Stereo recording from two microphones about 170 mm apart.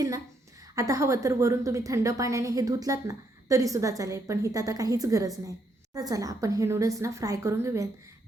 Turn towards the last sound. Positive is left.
turn(degrees=-15)  # may be behind; listen again after turning